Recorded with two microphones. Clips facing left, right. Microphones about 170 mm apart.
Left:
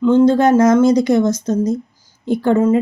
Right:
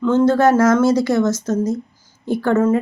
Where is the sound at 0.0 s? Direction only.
10° left (ahead or behind).